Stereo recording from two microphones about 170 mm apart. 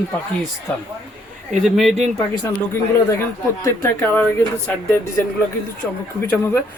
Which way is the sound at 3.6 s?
10° left (ahead or behind).